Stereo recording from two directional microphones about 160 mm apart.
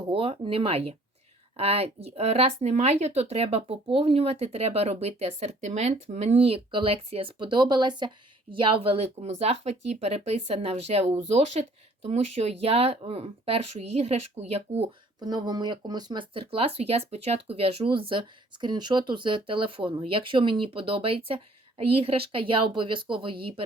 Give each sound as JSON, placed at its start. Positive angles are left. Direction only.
{"t": 0.1, "sound": "speech", "side_deg": -35}
{"t": 15.2, "sound": "speech", "side_deg": -25}